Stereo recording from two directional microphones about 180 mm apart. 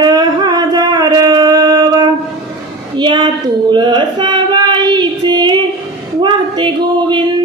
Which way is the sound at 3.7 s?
25° right (ahead or behind).